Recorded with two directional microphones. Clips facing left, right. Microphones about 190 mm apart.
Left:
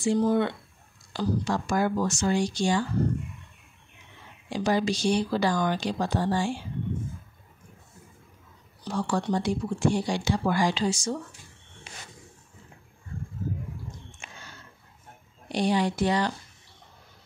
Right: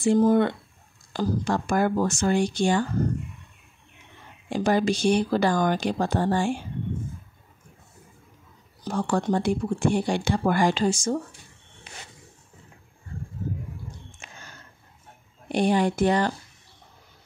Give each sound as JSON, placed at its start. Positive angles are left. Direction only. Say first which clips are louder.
{"t": 0.0, "sound": "speech", "louder": "right 4 dB", "side_deg": -50}
{"t": 4.5, "sound": "speech", "louder": "right 3 dB", "side_deg": -50}
{"t": 8.8, "sound": "speech", "louder": "right 3 dB", "side_deg": -50}
{"t": 15.4, "sound": "speech", "louder": "right 3 dB", "side_deg": -50}